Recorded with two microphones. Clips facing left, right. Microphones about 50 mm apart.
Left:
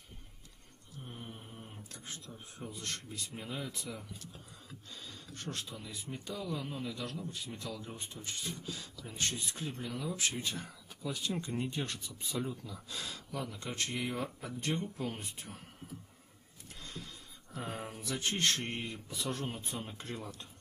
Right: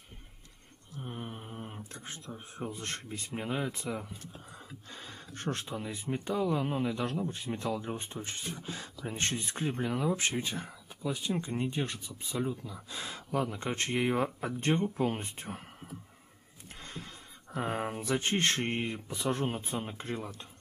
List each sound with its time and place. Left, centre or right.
1.0 s a sound: right
2.0 s speech: right
13.3 s speech: right